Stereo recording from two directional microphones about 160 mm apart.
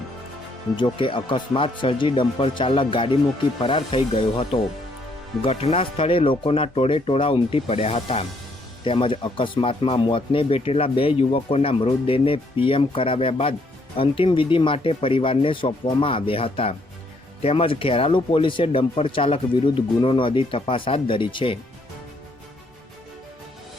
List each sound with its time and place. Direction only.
0.8 s speech: 30° left (ahead or behind)